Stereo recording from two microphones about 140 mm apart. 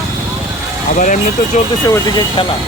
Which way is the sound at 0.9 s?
65° left (ahead or behind).